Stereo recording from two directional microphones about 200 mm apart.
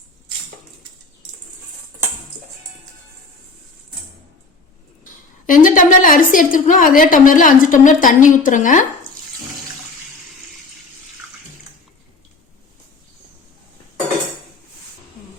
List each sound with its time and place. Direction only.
5.5 s a woman's voice: 40° left (ahead or behind)